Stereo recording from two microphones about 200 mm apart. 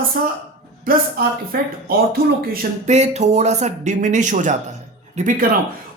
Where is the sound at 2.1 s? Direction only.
50° right (ahead or behind).